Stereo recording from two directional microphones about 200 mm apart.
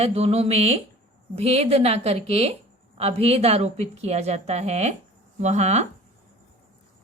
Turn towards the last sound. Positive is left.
turn(degrees=-35)  # may be behind; listen again after turning